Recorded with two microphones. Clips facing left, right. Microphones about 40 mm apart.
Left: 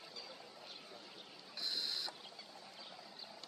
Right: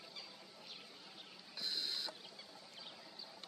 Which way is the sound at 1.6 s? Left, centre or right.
Right.